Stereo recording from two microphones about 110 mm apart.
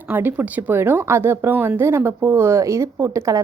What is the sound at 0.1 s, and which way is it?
A woman's voice, 15° right (ahead or behind).